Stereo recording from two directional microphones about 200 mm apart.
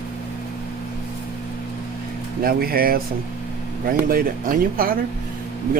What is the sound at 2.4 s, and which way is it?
Speech, 50° right (ahead or behind).